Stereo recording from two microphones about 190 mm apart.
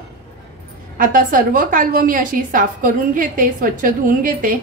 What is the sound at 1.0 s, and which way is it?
A woman's voice, 45° right (ahead or behind).